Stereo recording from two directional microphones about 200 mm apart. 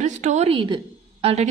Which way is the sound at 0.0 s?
35° right (ahead or behind).